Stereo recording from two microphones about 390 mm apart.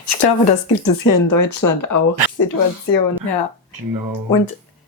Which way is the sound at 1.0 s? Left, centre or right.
Left.